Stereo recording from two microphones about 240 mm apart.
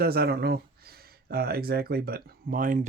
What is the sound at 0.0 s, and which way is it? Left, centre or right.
Speech, right.